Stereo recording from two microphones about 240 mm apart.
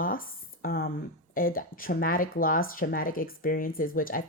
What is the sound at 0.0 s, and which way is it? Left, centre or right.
A woman's voice, left.